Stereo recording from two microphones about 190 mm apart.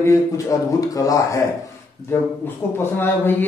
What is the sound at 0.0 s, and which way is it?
A man's voice, 15° left (ahead or behind).